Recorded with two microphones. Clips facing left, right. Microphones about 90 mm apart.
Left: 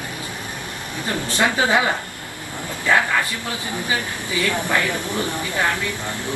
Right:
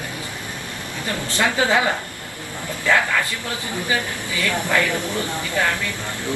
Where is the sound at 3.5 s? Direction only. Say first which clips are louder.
Even; 20° left (ahead or behind).